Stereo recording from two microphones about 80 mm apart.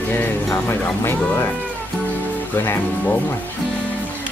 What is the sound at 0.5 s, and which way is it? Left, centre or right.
Speech, left.